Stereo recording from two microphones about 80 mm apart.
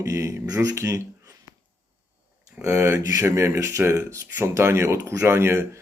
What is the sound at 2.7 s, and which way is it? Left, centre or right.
Speech, right.